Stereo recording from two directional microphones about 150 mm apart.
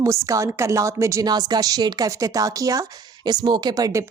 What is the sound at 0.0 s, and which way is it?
Speech, 20° right (ahead or behind).